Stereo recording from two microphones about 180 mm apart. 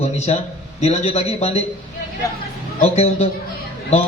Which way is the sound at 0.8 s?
35° left (ahead or behind).